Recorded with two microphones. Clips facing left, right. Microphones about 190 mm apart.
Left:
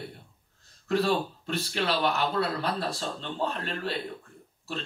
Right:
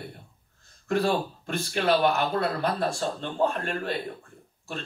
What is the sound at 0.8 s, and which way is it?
Speech, 50° right (ahead or behind).